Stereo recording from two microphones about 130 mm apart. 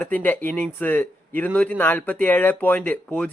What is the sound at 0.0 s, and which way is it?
Speech, 15° left (ahead or behind).